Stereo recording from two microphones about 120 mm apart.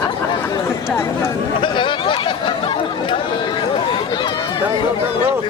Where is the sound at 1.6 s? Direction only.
40° left (ahead or behind).